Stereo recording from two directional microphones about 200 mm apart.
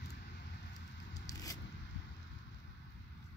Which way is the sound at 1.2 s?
15° left (ahead or behind).